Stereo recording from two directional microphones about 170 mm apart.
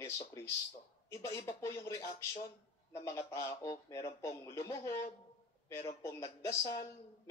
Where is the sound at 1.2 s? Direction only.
15° left (ahead or behind).